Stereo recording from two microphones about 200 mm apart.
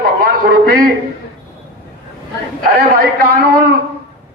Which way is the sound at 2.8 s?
50° right (ahead or behind).